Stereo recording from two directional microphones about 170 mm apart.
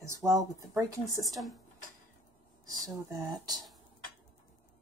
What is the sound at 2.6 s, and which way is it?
Speech, 20° right (ahead or behind).